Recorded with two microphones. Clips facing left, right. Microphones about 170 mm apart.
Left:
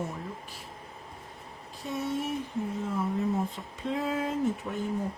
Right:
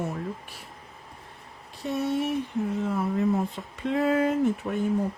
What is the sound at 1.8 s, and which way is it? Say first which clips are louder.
Speech: right 5 dB; 70° right (ahead or behind).